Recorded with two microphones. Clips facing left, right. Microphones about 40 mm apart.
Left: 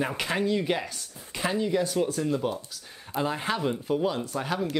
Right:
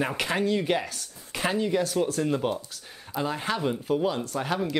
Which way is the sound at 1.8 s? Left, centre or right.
Centre.